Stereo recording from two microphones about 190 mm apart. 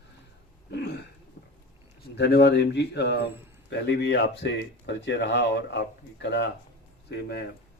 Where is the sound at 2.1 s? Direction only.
60° left (ahead or behind).